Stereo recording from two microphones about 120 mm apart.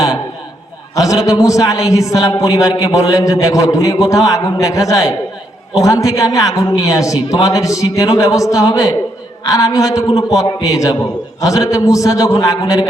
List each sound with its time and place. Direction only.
0.9 s a man's voice: 30° left (ahead or behind)